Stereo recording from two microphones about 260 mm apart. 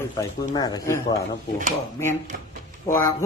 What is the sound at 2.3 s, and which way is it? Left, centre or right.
Speech, right.